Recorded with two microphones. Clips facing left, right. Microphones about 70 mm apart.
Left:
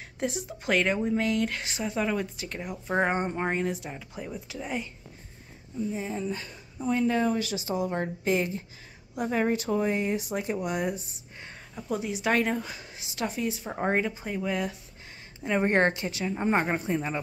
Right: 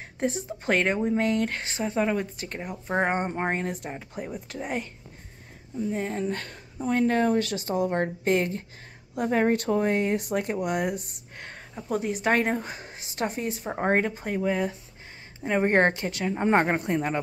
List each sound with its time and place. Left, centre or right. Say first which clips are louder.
0.2 s speech: right 3 dB; right
3.3 s speech: right 1 dB; right
3.5 s speech: left 1 dB; right
5.9 s speech: right 4 dB; right
11.9 s speech: right 2 dB; right
14.4 s speech: right 4 dB; right